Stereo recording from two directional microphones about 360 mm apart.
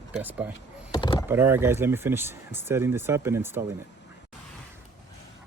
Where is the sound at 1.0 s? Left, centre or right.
Centre.